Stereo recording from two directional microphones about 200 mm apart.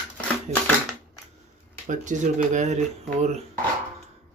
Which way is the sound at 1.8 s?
40° right (ahead or behind).